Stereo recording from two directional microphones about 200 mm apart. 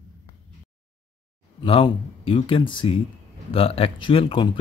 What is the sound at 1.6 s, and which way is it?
Speech, 25° left (ahead or behind).